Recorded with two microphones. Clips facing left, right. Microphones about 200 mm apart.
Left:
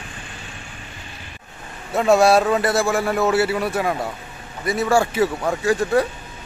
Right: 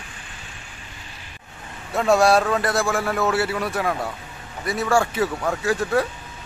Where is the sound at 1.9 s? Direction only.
5° left (ahead or behind).